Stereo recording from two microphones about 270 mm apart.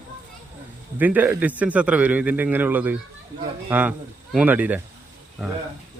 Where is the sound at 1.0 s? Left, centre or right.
Centre.